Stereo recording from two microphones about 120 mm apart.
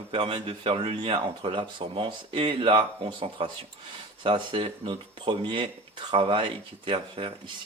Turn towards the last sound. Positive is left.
turn(degrees=-45)  # may be behind; listen again after turning